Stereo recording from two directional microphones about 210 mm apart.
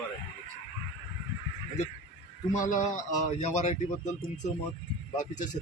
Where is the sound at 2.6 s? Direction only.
35° left (ahead or behind).